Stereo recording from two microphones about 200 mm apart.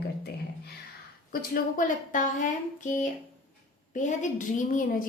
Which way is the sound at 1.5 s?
40° left (ahead or behind).